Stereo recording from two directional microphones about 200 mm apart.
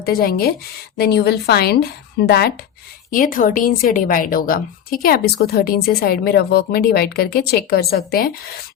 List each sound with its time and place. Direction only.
0.0 s a woman's voice: 50° left (ahead or behind)